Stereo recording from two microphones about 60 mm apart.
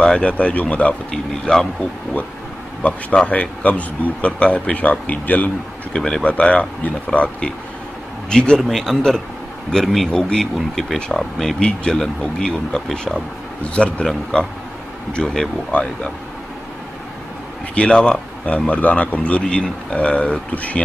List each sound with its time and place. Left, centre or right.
0.0 s a man's voice: centre
1.1 s speech: centre
2.8 s a man's voice: centre
5.9 s a man's voice: centre
17.7 s a man's voice: centre